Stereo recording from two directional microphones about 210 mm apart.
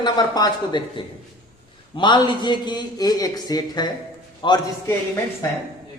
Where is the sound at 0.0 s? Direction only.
20° left (ahead or behind).